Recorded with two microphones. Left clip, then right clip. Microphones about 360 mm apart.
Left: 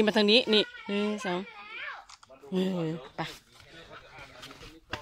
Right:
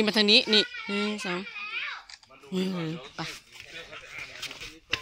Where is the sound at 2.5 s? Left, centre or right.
Centre.